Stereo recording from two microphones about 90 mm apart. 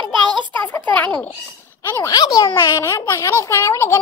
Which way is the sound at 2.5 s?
30° left (ahead or behind).